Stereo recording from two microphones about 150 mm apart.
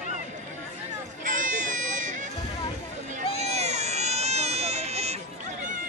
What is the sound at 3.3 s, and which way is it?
Baby cry, 45° right (ahead or behind).